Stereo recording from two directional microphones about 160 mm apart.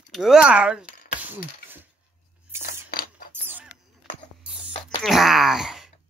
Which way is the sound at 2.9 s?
65° left (ahead or behind).